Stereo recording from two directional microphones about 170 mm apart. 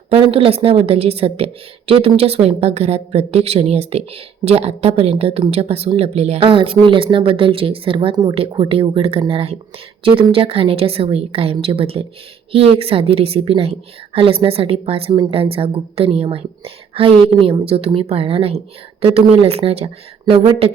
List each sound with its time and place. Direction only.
0.3 s a woman's voice: 35° right (ahead or behind)